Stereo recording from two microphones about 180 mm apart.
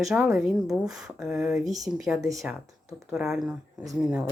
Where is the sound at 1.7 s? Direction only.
20° right (ahead or behind).